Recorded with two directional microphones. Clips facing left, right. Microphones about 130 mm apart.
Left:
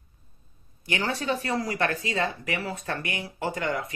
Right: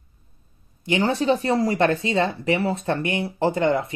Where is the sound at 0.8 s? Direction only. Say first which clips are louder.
Right 8 dB; 25° right (ahead or behind).